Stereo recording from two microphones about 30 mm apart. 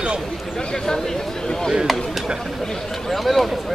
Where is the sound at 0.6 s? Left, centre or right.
Left.